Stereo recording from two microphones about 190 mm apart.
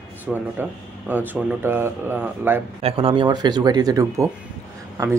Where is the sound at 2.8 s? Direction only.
30° right (ahead or behind).